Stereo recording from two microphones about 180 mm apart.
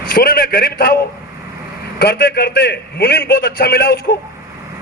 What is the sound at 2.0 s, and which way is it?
A man's voice, 65° left (ahead or behind).